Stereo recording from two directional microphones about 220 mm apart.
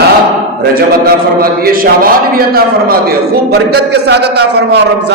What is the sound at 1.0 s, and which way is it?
A man's voice, 40° right (ahead or behind).